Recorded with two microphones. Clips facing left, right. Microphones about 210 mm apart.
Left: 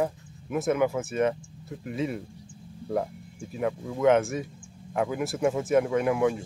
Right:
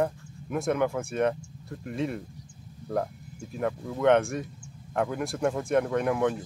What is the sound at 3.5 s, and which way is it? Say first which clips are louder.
Speech: left 1 dB; centre (ahead or behind).